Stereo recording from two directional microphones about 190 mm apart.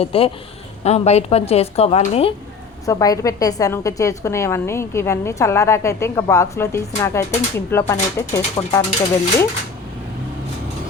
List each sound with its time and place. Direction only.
0.0 s a woman's voice: 30° left (ahead or behind)
2.8 s a woman's voice: 20° left (ahead or behind)